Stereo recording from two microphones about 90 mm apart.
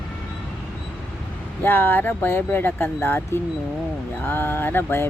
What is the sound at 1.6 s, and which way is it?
Speech, 25° left (ahead or behind).